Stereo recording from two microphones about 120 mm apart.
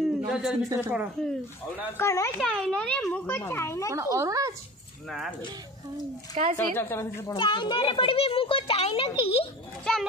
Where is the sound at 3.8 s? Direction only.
25° right (ahead or behind).